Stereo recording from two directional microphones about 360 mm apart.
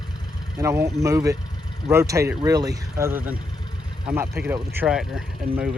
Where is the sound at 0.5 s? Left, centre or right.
Centre.